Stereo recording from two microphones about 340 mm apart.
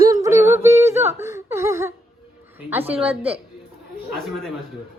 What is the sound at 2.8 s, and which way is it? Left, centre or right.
Yodeling, centre.